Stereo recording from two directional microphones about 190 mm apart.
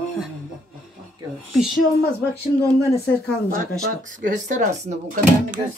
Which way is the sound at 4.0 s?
40° right (ahead or behind).